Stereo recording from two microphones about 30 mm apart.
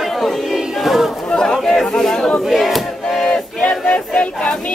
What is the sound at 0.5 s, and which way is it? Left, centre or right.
Choir, centre.